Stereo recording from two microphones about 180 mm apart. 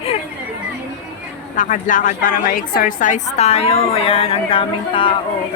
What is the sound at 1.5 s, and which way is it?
A woman's voice, 45° left (ahead or behind).